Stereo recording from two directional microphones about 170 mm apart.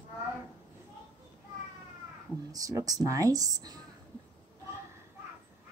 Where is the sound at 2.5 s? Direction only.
20° right (ahead or behind).